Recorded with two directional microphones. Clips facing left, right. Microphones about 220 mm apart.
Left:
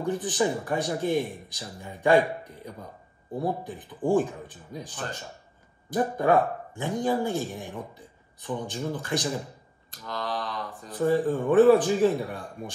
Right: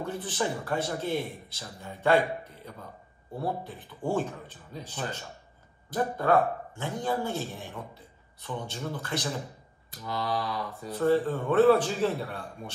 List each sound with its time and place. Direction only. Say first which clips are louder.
0.0 s speech: left 5 dB; 15° left (ahead or behind)
6.1 s speech: left 1 dB; 15° left (ahead or behind)
10.0 s mantra: right 1 dB; 10° right (ahead or behind)
11.1 s speech: left 2 dB; 15° left (ahead or behind)